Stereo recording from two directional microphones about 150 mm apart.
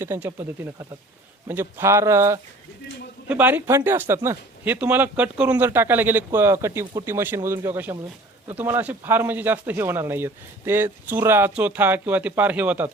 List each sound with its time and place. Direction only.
0.0 s speech: 15° right (ahead or behind)